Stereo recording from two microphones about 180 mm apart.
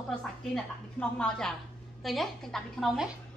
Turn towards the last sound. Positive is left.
turn(degrees=0)  # may be behind; listen again after turning